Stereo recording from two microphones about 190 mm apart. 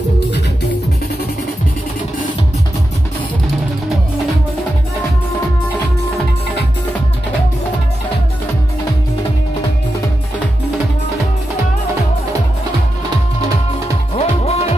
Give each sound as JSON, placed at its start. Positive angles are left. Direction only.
{"t": 14.1, "sound": "music", "side_deg": 35}